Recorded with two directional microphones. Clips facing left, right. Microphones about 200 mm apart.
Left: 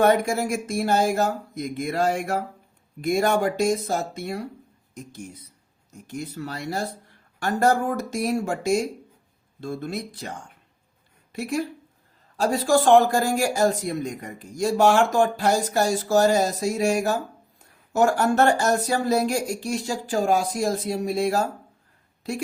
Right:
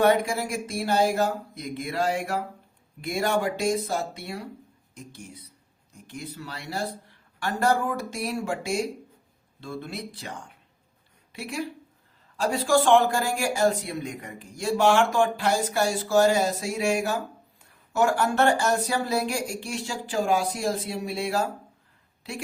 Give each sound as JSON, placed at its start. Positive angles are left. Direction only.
{"t": 0.0, "sound": "speech", "side_deg": 45}